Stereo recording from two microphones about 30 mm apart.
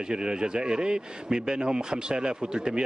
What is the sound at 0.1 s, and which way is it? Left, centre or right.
Speech, right.